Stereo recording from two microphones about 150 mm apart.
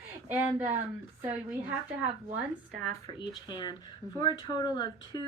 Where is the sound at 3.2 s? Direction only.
30° left (ahead or behind).